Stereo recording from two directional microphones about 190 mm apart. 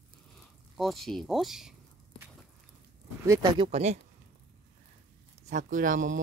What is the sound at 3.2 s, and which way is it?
Speech, 15° right (ahead or behind).